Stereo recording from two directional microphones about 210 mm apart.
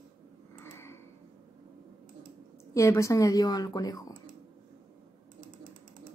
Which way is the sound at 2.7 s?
15° left (ahead or behind).